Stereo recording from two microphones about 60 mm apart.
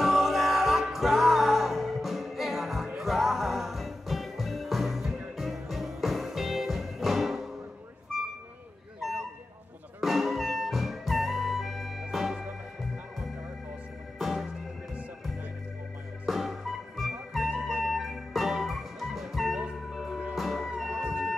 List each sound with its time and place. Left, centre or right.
0.0 s music: centre
9.9 s music: centre
14.1 s music: centre
16.3 s music: centre
20.9 s music: centre